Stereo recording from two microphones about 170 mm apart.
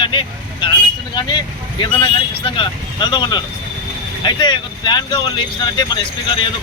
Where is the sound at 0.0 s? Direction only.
30° left (ahead or behind).